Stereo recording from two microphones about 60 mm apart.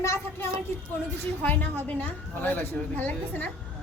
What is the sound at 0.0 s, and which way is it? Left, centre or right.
Speech, left.